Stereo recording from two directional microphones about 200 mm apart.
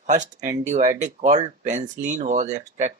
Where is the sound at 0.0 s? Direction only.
35° right (ahead or behind).